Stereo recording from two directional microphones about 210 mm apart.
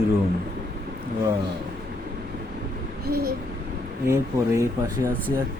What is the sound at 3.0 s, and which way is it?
Speech, 45° right (ahead or behind).